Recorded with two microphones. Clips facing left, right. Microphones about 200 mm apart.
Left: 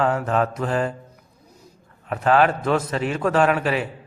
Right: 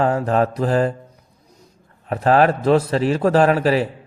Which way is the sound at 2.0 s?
35° right (ahead or behind).